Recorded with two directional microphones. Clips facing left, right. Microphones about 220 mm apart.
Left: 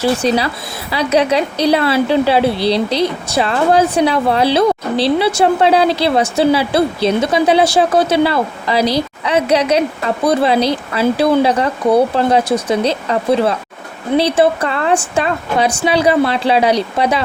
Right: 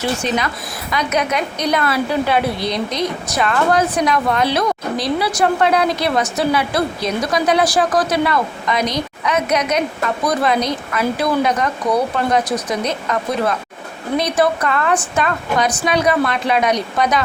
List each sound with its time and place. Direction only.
0.2 s a woman's voice: 35° left (ahead or behind)